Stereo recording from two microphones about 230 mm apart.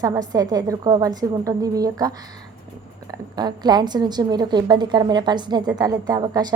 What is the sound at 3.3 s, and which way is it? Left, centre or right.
A woman's voice, centre.